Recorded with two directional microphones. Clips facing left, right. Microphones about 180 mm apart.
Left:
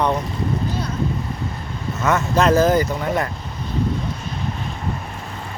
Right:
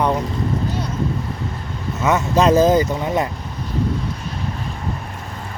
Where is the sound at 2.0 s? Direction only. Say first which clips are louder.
Right 2 dB; 15° right (ahead or behind).